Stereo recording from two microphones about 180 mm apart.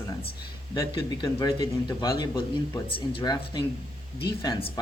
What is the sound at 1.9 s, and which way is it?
Speech, 20° left (ahead or behind).